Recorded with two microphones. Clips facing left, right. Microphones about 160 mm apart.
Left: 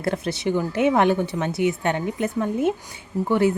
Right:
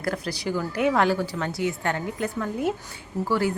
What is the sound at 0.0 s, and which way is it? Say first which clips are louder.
A man's voice: left 4 dB; 25° left (ahead or behind).